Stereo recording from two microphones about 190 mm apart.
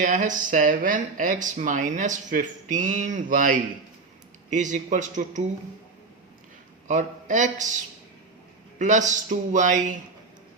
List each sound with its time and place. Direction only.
0.0 s a man's voice: 40° right (ahead or behind)
6.8 s a man's voice: 40° right (ahead or behind)
8.8 s a man's voice: 40° right (ahead or behind)